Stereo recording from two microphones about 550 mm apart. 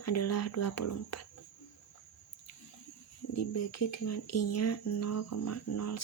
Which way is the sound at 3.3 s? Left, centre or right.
Left.